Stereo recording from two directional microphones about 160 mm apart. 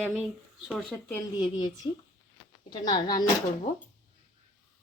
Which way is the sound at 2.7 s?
25° left (ahead or behind).